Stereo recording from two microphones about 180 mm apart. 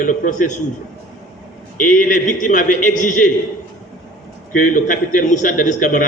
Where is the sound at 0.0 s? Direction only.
45° left (ahead or behind).